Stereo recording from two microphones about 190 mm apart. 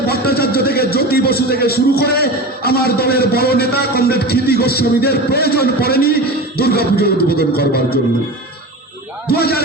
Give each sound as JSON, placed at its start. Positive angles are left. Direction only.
{"t": 0.1, "sound": "a man's voice", "side_deg": 55}
{"t": 9.2, "sound": "a man's voice", "side_deg": 55}